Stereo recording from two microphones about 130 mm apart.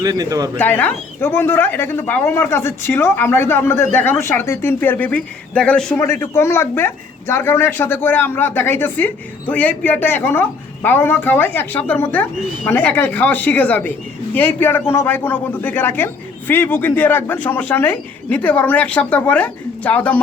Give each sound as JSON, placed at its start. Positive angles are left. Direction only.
{"t": 0.0, "sound": "speech", "side_deg": -30}
{"t": 0.6, "sound": "a man's voice", "side_deg": 15}
{"t": 6.0, "sound": "a man's voice", "side_deg": 20}